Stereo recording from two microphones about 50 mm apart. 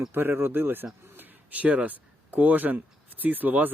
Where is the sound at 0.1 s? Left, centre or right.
Right.